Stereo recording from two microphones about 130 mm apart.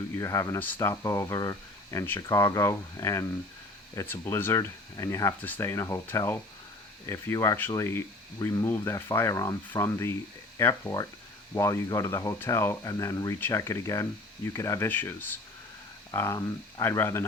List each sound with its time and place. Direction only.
0.2 s speech: 25° left (ahead or behind)